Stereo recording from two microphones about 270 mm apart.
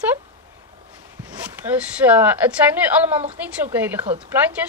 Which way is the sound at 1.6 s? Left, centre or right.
Centre.